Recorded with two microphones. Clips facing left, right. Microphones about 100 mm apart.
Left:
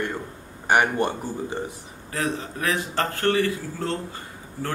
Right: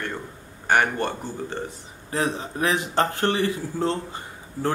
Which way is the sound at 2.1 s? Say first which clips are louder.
Right 2 dB; 20° right (ahead or behind).